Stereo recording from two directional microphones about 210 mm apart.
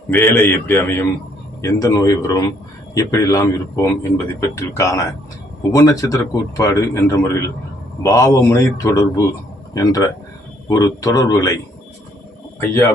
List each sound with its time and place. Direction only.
0.1 s a man's voice: 10° left (ahead or behind)